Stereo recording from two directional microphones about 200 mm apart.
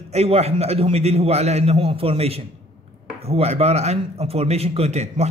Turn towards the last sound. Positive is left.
turn(degrees=-35)  # may be behind; listen again after turning